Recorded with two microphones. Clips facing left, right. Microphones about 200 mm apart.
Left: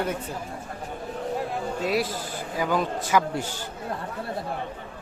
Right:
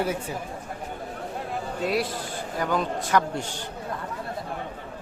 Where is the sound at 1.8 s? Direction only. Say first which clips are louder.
Right 1 dB; centre (ahead or behind).